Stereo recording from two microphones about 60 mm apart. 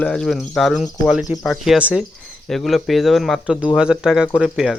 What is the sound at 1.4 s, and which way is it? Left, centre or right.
Speech, centre.